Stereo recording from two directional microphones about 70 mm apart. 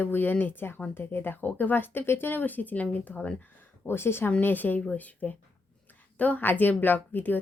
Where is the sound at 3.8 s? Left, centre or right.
Left.